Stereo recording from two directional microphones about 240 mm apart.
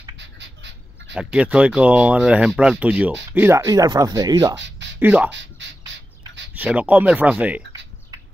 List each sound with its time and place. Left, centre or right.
0.2 s a sound: right
1.1 s speech: centre
4.6 s a sound: right
5.0 s speech: centre
5.6 s bird: right
6.5 s speech: centre